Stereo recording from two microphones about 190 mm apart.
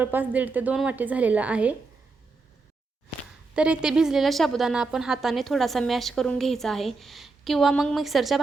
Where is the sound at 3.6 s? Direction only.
5° right (ahead or behind).